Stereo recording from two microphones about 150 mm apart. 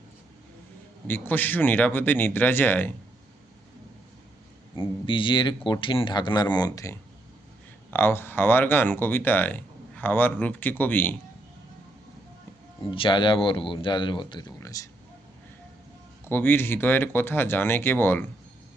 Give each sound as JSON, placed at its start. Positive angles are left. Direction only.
{"t": 1.0, "sound": "speech", "side_deg": 15}
{"t": 4.7, "sound": "speech", "side_deg": 35}
{"t": 12.9, "sound": "speech", "side_deg": 35}
{"t": 16.2, "sound": "speech", "side_deg": 15}